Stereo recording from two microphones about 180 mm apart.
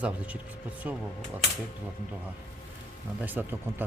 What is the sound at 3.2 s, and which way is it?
Speech, 10° right (ahead or behind).